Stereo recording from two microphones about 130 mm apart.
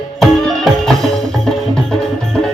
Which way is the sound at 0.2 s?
Centre (ahead or behind).